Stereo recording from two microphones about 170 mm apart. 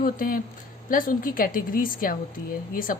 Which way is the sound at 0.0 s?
55° left (ahead or behind).